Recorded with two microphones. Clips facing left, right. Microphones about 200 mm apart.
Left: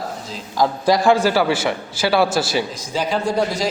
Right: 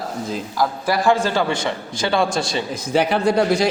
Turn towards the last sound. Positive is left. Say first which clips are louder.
# right 3 dB
turn(degrees=-65)  # may be behind; listen again after turning